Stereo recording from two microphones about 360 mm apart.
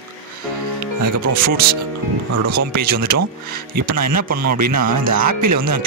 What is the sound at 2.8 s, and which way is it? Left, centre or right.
Speech, right.